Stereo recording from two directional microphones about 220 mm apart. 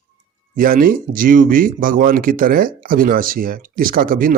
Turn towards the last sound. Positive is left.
turn(degrees=-40)  # may be behind; listen again after turning